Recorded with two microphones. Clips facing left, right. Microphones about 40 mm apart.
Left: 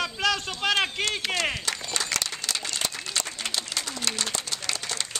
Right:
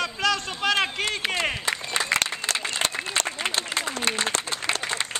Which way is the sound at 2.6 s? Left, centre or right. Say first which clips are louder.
Right 4 dB; right.